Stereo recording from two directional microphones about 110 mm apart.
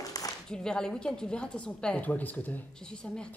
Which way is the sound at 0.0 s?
35° left (ahead or behind).